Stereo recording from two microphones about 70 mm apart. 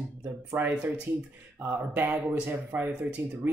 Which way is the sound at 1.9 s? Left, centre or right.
Right.